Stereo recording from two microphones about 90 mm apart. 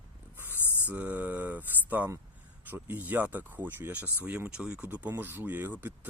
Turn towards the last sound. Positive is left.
turn(degrees=-20)  # may be behind; listen again after turning